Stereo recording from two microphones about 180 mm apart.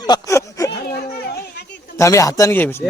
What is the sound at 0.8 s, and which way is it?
Children playing, 60° left (ahead or behind).